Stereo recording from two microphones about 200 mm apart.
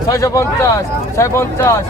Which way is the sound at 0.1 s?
15° left (ahead or behind).